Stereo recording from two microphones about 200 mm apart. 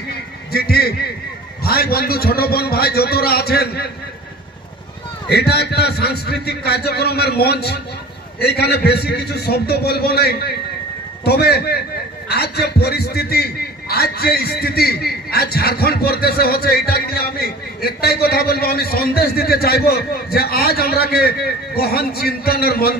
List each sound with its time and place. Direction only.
0.5 s a man's voice: 50° left (ahead or behind)
5.3 s a man's voice: 55° left (ahead or behind)